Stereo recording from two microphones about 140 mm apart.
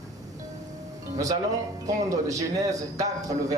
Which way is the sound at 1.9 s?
25° right (ahead or behind).